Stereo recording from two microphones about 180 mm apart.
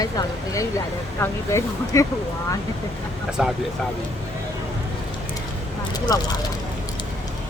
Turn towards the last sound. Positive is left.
turn(degrees=20)  # may be behind; listen again after turning